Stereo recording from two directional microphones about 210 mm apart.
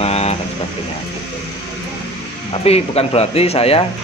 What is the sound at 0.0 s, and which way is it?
Vehicle, 30° left (ahead or behind).